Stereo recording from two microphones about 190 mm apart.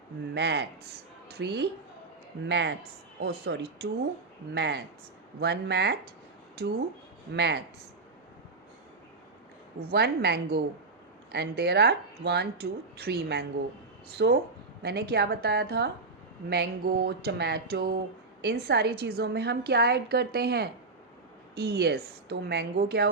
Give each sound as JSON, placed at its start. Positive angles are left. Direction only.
{"t": 0.3, "sound": "a woman's voice", "side_deg": -60}
{"t": 9.8, "sound": "speech", "side_deg": -55}